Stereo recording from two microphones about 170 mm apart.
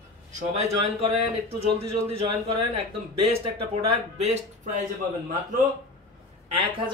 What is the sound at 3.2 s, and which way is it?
Speech, 35° right (ahead or behind).